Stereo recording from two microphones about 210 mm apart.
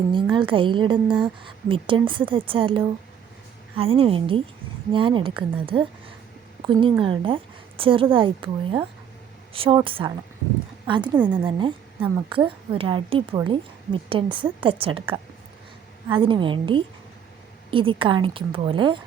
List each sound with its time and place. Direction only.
0.1 s a woman's voice: 20° right (ahead or behind)
6.6 s a woman's voice: 25° right (ahead or behind)